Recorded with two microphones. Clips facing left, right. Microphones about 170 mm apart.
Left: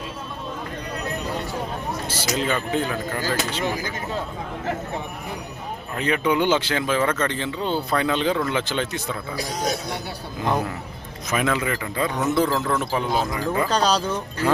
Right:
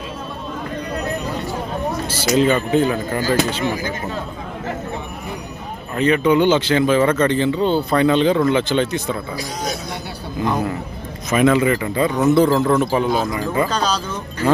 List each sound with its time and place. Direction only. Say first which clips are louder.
2.3 s speech: right 8 dB; centre (ahead or behind)
6.0 s speech: right 6 dB; 10° left (ahead or behind)
11.3 s speech: right 8 dB; centre (ahead or behind)
12.5 s a man's voice: right 7 dB; 15° right (ahead or behind)
13.7 s speech: left 1 dB; 35° left (ahead or behind)